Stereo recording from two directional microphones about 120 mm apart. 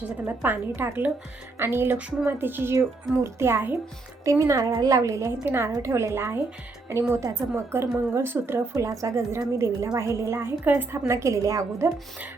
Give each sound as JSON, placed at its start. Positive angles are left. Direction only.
{"t": 0.3, "sound": "a woman's voice", "side_deg": -15}